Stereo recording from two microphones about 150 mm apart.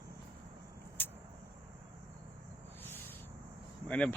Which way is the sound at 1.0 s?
15° left (ahead or behind).